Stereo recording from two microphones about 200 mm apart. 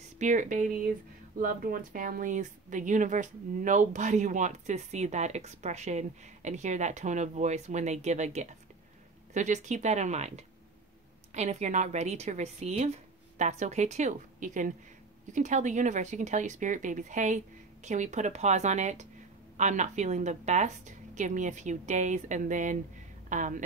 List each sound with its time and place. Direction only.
0.2 s speech: 40° right (ahead or behind)